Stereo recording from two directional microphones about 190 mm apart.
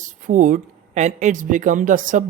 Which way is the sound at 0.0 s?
40° right (ahead or behind).